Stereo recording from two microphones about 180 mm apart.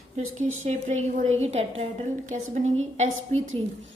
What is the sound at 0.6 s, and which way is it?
A woman's voice, 40° right (ahead or behind).